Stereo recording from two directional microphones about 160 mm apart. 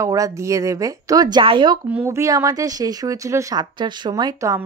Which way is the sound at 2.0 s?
20° right (ahead or behind).